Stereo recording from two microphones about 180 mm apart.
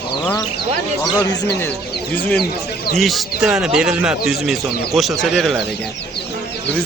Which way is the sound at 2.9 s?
Centre (ahead or behind).